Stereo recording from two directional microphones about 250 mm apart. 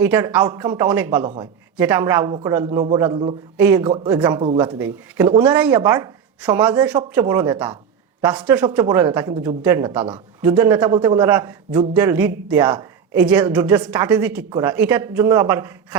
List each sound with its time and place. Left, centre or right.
0.0 s a man's voice: centre
6.8 s a man's voice: centre
14.5 s a man's voice: centre